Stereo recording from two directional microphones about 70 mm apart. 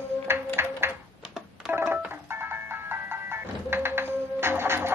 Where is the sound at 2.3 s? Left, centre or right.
Right.